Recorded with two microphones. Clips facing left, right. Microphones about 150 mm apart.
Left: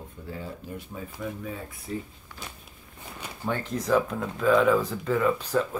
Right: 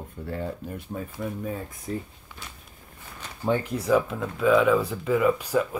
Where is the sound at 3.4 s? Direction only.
15° right (ahead or behind).